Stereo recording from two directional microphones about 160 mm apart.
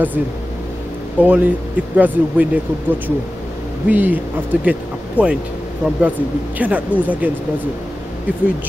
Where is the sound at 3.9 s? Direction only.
10° right (ahead or behind).